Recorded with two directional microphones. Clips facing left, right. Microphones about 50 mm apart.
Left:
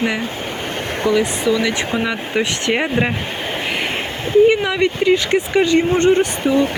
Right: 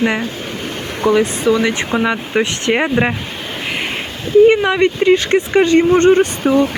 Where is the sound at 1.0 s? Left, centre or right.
Right.